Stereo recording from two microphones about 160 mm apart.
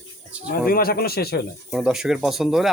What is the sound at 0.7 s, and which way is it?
Speech, 70° left (ahead or behind).